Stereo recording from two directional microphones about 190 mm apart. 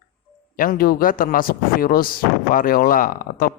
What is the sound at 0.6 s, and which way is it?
Speech, 50° left (ahead or behind).